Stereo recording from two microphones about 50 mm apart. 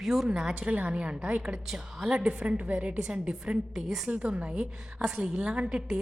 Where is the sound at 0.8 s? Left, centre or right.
Right.